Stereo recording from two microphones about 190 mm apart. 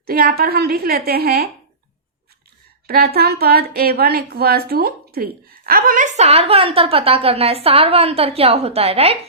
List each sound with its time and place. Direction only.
0.0 s a woman's voice: 50° right (ahead or behind)
2.8 s speech: 55° right (ahead or behind); by 9.1 s 30° right (ahead or behind)